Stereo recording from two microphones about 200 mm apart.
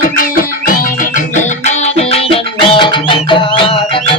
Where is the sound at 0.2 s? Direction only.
45° left (ahead or behind).